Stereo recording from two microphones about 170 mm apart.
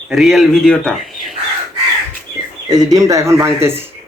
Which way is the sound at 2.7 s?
20° right (ahead or behind).